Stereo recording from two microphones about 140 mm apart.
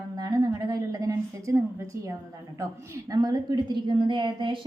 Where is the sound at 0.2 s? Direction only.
25° right (ahead or behind).